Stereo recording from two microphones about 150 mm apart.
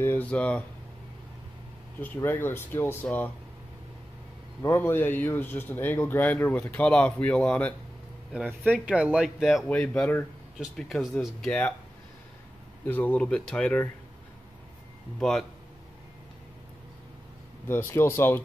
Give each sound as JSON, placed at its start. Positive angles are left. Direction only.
{"t": 0.0, "sound": "speech", "side_deg": 10}
{"t": 2.0, "sound": "speech", "side_deg": 10}
{"t": 4.6, "sound": "speech", "side_deg": 15}
{"t": 8.5, "sound": "speech", "side_deg": -10}
{"t": 12.8, "sound": "speech", "side_deg": 10}
{"t": 15.1, "sound": "speech", "side_deg": 5}
{"t": 17.6, "sound": "speech", "side_deg": 15}